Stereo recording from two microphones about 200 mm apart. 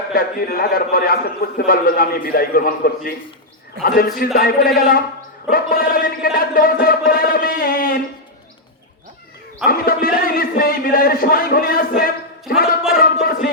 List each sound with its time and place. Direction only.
0.1 s a man's voice: 45° left (ahead or behind)
9.6 s a man's voice: 45° left (ahead or behind)